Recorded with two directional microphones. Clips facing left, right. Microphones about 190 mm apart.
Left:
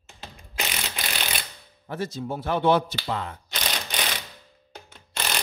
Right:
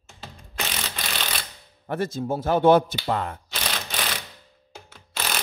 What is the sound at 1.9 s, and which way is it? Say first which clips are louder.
A man's voice: right 4 dB; 50° right (ahead or behind).